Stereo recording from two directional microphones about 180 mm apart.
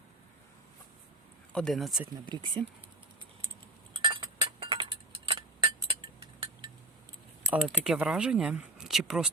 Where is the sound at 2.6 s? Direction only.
25° right (ahead or behind).